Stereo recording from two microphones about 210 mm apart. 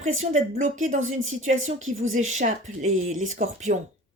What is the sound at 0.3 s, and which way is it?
Music, 35° right (ahead or behind).